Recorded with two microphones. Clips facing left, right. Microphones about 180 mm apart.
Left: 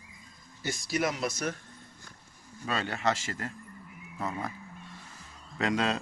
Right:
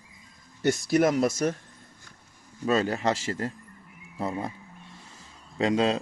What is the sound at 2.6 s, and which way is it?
A man's voice, 40° right (ahead or behind).